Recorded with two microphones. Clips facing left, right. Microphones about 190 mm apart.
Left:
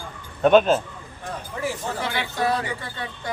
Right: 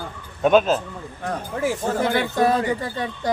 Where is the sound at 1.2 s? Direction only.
50° right (ahead or behind).